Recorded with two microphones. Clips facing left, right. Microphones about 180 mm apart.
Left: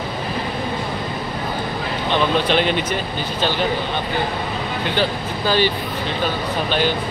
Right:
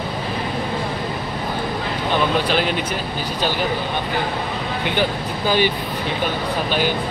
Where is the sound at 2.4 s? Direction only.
5° right (ahead or behind).